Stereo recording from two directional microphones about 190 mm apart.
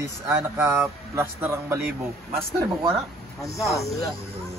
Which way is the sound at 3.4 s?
15° left (ahead or behind).